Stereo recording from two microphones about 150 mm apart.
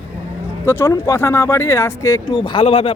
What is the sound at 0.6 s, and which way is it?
Speech, 15° left (ahead or behind).